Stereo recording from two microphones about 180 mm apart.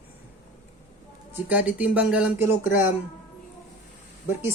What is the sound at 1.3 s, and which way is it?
Speech, 10° right (ahead or behind).